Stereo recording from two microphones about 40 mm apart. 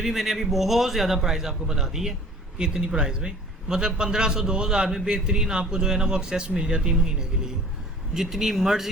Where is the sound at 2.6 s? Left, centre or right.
Right.